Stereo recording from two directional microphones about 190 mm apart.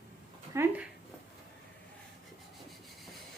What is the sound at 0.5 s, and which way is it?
Speech, 15° right (ahead or behind).